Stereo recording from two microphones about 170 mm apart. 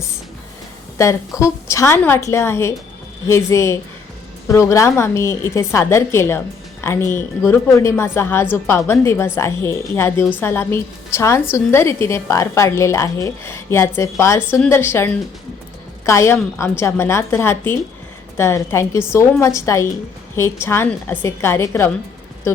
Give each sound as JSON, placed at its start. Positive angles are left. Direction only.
{"t": 0.9, "sound": "a woman's voice", "side_deg": 15}